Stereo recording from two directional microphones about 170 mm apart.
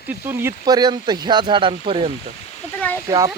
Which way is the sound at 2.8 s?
10° left (ahead or behind).